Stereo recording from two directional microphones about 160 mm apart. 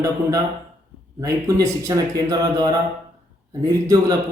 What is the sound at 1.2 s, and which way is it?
A man's voice, 20° right (ahead or behind).